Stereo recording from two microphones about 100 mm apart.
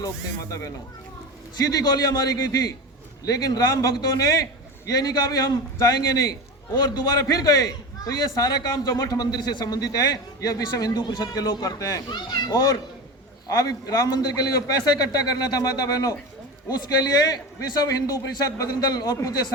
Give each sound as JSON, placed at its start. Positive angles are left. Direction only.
{"t": 1.5, "sound": "a man's voice", "side_deg": 40}